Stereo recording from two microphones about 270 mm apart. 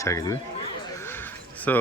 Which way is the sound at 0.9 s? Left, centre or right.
Centre.